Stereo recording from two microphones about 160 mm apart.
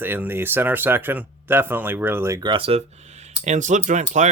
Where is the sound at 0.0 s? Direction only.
15° right (ahead or behind).